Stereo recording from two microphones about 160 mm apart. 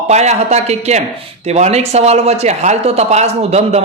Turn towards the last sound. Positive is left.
turn(degrees=-40)  # may be behind; listen again after turning